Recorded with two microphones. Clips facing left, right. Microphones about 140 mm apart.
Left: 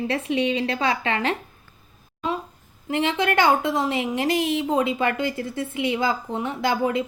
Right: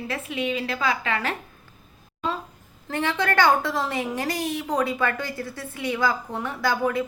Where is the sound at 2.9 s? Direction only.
20° left (ahead or behind).